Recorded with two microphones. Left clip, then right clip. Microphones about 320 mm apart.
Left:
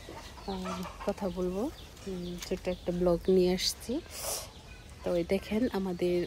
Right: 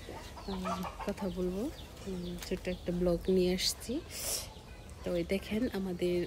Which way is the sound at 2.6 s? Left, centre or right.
Centre.